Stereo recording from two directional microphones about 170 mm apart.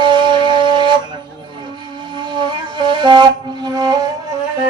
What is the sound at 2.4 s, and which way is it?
Wind instrument, 25° right (ahead or behind).